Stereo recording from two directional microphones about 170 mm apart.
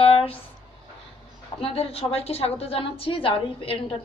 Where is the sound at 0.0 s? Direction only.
35° left (ahead or behind).